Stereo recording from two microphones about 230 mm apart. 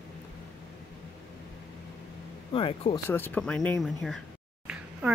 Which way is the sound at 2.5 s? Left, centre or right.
Left.